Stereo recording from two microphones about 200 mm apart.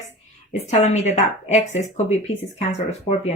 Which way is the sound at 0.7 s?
35° left (ahead or behind).